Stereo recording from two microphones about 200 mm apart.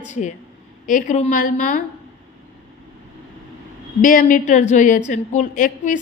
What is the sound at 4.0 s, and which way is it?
A woman's voice, 40° left (ahead or behind).